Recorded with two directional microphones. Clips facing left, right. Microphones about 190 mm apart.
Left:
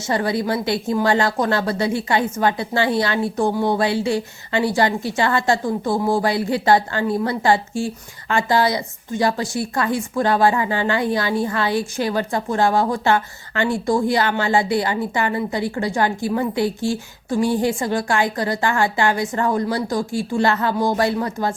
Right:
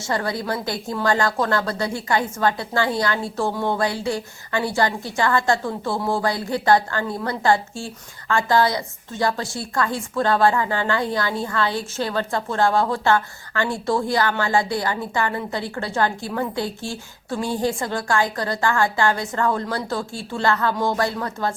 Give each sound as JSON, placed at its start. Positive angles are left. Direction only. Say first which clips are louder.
{"t": 0.0, "sound": "a woman's voice", "louder": "left 4 dB", "side_deg": 20}